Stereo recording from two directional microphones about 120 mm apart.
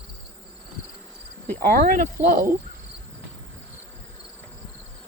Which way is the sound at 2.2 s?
15° right (ahead or behind).